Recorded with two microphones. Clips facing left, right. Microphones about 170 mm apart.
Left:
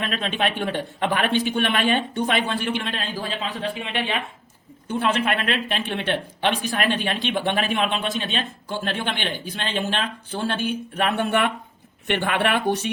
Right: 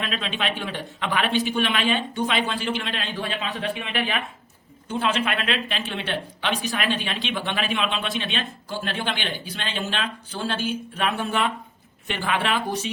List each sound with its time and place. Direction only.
0.0 s speech: 50° left (ahead or behind)
3.2 s speech: 30° left (ahead or behind)
4.9 s speech: 55° left (ahead or behind)